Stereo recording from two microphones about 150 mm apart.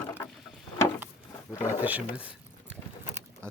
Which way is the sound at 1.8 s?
10° right (ahead or behind).